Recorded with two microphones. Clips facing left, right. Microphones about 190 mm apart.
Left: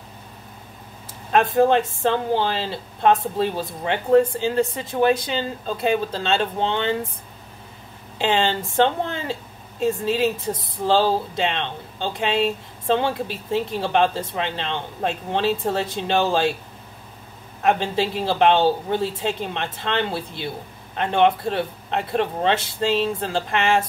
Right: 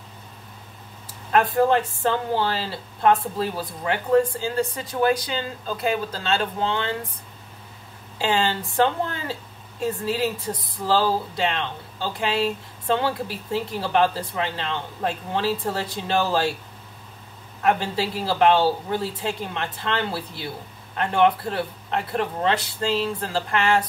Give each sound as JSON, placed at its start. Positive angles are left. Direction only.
{"t": 1.3, "sound": "speech", "side_deg": 25}
{"t": 8.2, "sound": "speech", "side_deg": 20}
{"t": 17.6, "sound": "speech", "side_deg": 25}